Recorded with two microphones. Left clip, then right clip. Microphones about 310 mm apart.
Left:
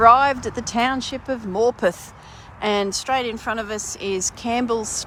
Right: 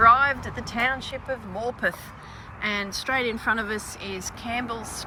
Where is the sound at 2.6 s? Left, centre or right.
Centre.